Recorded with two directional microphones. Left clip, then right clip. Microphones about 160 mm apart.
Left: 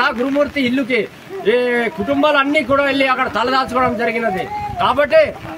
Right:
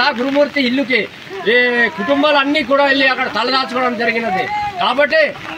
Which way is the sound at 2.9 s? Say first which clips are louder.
Right 2 dB; 40° left (ahead or behind).